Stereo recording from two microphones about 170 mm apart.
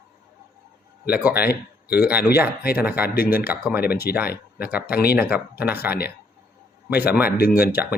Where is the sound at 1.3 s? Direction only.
65° left (ahead or behind).